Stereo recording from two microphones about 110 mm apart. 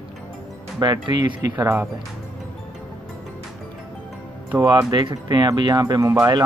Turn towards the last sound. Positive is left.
turn(degrees=-30)  # may be behind; listen again after turning